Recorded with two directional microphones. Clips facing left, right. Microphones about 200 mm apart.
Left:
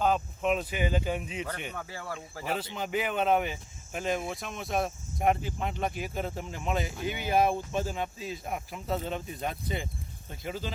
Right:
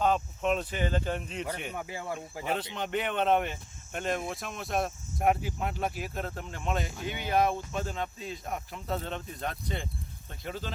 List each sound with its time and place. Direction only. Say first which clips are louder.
0.0 s speech: even; 5° left (ahead or behind)
1.5 s speech: right 2 dB; 10° right (ahead or behind)
2.4 s speech: even; 5° left (ahead or behind)